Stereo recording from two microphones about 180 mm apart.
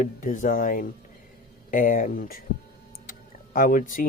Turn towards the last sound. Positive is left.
turn(degrees=50)  # may be behind; listen again after turning